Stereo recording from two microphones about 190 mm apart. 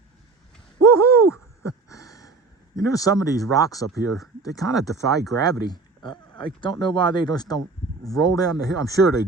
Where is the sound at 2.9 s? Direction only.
15° left (ahead or behind).